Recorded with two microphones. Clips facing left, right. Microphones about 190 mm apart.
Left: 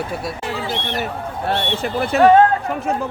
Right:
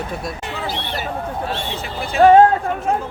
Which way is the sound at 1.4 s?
65° left (ahead or behind).